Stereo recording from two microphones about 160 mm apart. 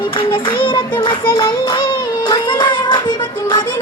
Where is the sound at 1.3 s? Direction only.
30° left (ahead or behind).